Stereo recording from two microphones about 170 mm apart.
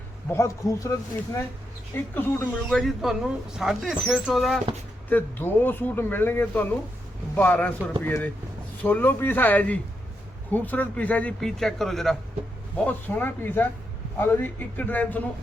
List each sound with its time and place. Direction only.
0.3 s speech: 15° left (ahead or behind); by 4.6 s centre (ahead or behind)
5.0 s speech: 10° left (ahead or behind)